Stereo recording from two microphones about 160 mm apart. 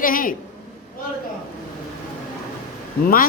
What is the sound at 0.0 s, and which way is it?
Speech, 60° left (ahead or behind).